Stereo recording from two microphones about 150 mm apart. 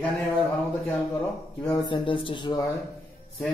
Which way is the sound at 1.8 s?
35° left (ahead or behind).